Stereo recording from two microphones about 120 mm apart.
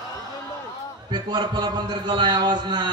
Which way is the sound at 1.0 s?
35° right (ahead or behind).